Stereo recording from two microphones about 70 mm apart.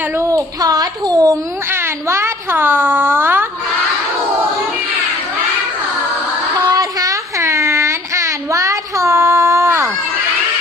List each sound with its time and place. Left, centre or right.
0.2 s a child's voice: right
1.7 s speech: right
6.7 s a sound: right